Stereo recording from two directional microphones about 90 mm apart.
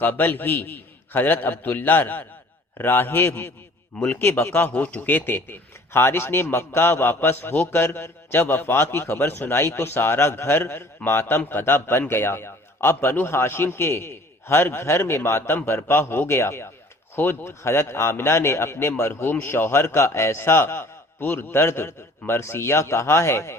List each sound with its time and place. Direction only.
0.0 s speech: 20° left (ahead or behind)